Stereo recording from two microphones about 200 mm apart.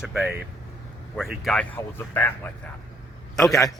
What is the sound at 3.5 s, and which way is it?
Speech, 15° left (ahead or behind).